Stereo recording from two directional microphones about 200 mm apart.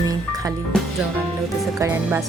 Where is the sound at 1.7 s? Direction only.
15° right (ahead or behind).